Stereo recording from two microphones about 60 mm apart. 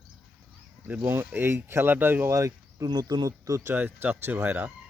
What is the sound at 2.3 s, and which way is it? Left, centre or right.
Speech, right.